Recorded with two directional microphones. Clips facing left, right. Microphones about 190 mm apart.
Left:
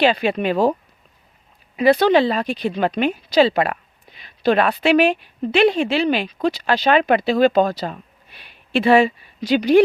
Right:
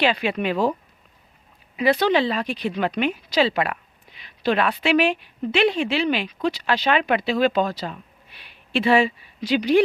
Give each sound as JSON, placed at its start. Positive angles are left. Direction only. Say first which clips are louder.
{"t": 0.0, "sound": "a woman's voice", "louder": "left 4 dB", "side_deg": 40}